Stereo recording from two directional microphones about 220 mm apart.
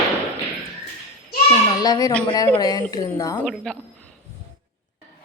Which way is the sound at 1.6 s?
15° left (ahead or behind).